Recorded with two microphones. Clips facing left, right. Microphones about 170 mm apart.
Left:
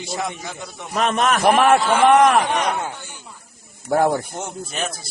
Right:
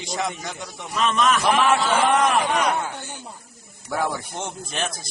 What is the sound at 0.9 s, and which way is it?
A man's voice, 55° left (ahead or behind).